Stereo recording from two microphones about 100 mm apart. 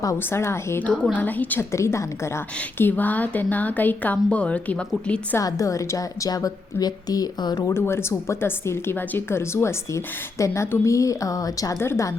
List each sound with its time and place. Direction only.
0.2 s speech: 25° left (ahead or behind)
0.9 s speech: 15° left (ahead or behind)
1.7 s speech: 30° left (ahead or behind)
2.6 s speech: 20° left (ahead or behind)
5.4 s a woman's voice: 35° left (ahead or behind)
7.7 s speech: 25° left (ahead or behind)